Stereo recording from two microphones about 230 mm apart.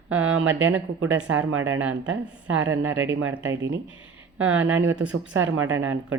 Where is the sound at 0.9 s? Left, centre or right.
Right.